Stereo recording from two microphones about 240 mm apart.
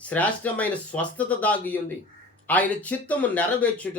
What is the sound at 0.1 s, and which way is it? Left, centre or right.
A man's voice, centre.